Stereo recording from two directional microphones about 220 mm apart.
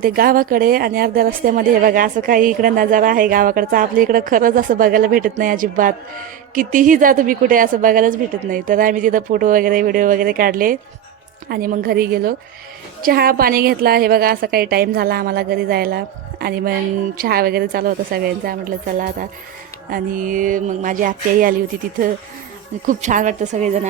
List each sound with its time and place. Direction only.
0.0 s a woman's voice: 40° right (ahead or behind)
22.9 s speech: 35° right (ahead or behind)